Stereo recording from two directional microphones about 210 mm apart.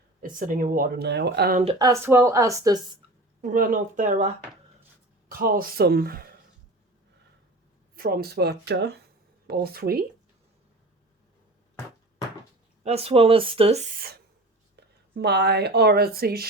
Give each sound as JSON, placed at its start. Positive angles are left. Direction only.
{"t": 0.2, "sound": "speech", "side_deg": -40}
{"t": 1.6, "sound": "speech", "side_deg": -15}
{"t": 3.4, "sound": "speech", "side_deg": -40}
{"t": 5.3, "sound": "speech", "side_deg": -45}
{"t": 7.9, "sound": "speech", "side_deg": -45}
{"t": 12.8, "sound": "speech", "side_deg": -30}
{"t": 14.8, "sound": "speech", "side_deg": -55}